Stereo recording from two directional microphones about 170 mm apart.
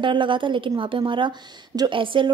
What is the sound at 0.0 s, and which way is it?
A woman's voice, 30° right (ahead or behind).